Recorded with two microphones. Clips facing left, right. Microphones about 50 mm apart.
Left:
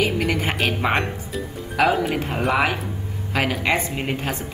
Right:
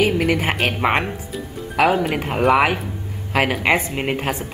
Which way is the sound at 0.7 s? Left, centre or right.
Right.